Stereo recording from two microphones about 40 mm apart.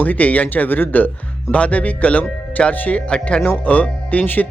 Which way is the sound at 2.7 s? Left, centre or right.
Left.